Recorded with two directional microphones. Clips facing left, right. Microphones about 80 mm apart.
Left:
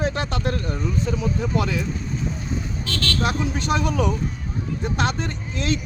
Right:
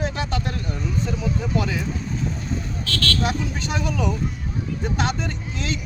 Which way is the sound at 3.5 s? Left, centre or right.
Left.